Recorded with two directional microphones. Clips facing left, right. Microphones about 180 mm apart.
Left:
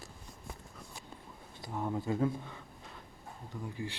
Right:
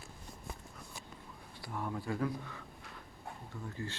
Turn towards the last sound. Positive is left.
turn(degrees=15)  # may be behind; listen again after turning